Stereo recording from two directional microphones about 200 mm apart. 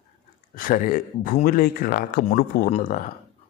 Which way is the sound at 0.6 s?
45° left (ahead or behind).